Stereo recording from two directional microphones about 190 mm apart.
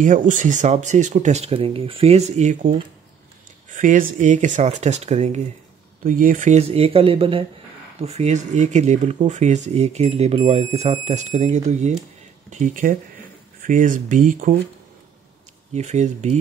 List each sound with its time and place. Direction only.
0.0 s speech: 45° right (ahead or behind)
15.7 s speech: 35° right (ahead or behind)